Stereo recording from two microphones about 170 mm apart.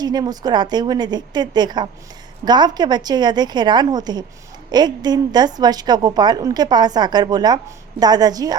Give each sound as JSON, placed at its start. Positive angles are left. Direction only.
{"t": 0.0, "sound": "a woman's voice", "side_deg": -25}